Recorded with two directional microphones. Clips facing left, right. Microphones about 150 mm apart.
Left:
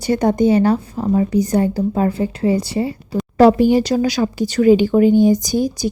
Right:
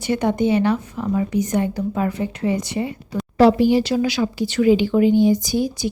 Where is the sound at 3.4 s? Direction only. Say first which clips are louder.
Left 3 dB; 45° left (ahead or behind).